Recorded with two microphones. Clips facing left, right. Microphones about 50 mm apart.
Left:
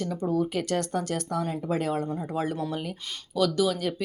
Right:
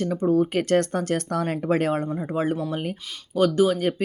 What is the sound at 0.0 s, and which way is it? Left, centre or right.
Speech, right.